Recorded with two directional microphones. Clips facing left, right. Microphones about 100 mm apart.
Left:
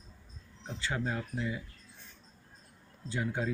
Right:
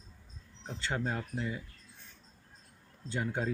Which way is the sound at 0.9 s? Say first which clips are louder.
Even; 35° right (ahead or behind).